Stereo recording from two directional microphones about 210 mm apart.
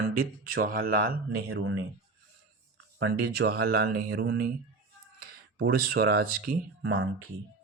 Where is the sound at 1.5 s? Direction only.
65° right (ahead or behind).